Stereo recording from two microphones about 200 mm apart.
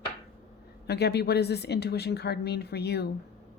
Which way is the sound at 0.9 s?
55° left (ahead or behind).